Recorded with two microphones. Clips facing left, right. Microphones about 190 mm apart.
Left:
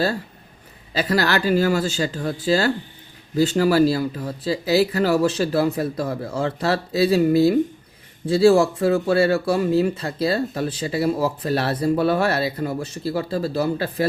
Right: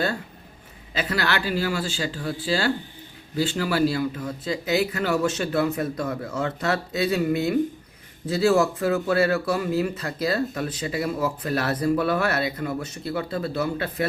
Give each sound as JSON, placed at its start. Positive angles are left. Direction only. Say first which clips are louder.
{"t": 0.9, "sound": "speech", "louder": "left 5 dB", "side_deg": 40}